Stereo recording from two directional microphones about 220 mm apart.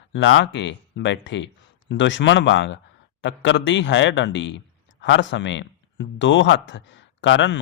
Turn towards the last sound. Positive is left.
turn(degrees=55)  # may be behind; listen again after turning